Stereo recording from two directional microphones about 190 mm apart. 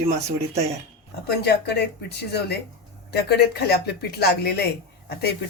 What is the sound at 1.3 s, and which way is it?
Speech, 60° left (ahead or behind).